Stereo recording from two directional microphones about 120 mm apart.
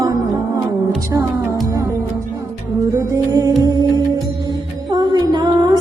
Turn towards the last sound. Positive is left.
turn(degrees=-35)  # may be behind; listen again after turning